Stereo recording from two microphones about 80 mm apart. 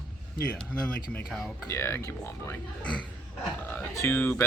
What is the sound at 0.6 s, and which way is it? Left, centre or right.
Speech, centre.